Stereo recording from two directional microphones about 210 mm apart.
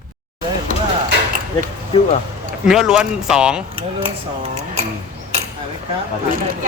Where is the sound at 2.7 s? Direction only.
5° right (ahead or behind).